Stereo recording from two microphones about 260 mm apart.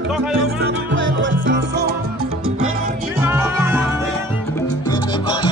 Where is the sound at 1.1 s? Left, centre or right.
Right.